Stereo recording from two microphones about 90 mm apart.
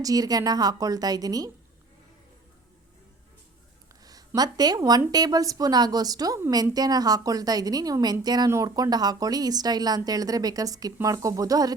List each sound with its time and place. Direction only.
0.0 s speech: 45° right (ahead or behind)
4.4 s speech: 45° right (ahead or behind)